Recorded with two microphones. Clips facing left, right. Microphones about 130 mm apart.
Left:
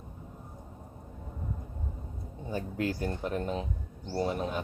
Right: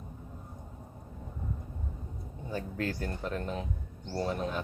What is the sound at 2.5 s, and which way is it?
Speech, 15° left (ahead or behind).